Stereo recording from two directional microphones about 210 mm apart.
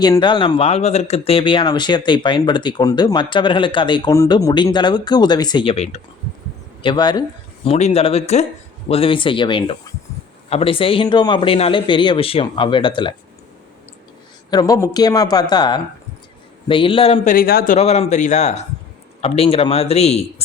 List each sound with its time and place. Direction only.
0.0 s speech: 20° left (ahead or behind)
14.5 s speech: 15° left (ahead or behind)
17.3 s speech: 45° left (ahead or behind)
17.7 s speech: 30° left (ahead or behind)